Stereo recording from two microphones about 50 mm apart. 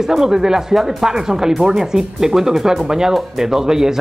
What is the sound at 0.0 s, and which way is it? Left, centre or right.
Speech, centre.